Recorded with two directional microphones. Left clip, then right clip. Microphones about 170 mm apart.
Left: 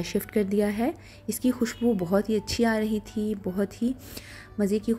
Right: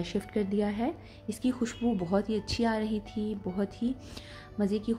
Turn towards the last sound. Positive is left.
turn(degrees=15)  # may be behind; listen again after turning